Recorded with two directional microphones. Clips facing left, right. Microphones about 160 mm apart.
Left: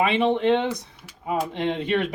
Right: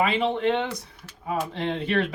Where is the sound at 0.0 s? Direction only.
20° left (ahead or behind).